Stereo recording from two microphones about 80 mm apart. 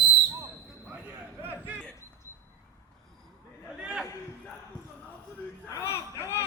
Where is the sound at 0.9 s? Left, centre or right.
Right.